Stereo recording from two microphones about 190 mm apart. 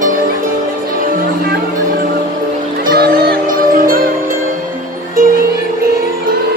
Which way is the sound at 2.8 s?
55° right (ahead or behind).